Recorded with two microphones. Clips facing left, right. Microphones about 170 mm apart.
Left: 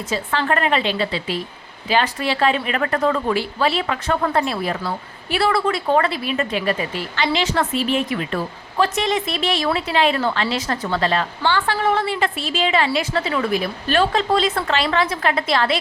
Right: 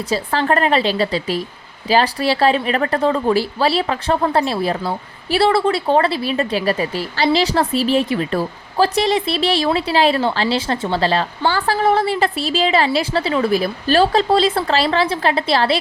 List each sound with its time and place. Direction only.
0.1 s a woman's voice: 35° right (ahead or behind)